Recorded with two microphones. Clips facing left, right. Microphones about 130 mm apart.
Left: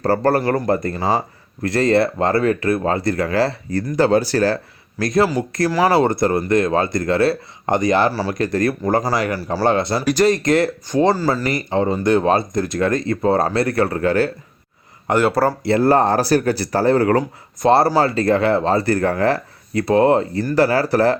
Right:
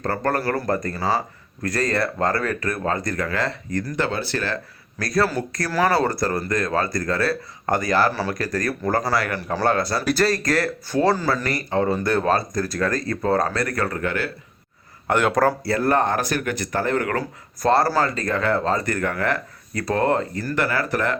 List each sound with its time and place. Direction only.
0.0 s speech: 35° left (ahead or behind)
4.9 s speech: 20° left (ahead or behind)
8.9 s speech: 15° left (ahead or behind)
9.7 s speech: 25° left (ahead or behind)
15.0 s speech: 5° left (ahead or behind)
15.6 s speech: 25° left (ahead or behind)